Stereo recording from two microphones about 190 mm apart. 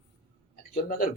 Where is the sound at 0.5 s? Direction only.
45° left (ahead or behind).